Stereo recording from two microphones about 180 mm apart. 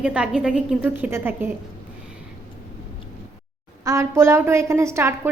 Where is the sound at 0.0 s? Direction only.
5° right (ahead or behind).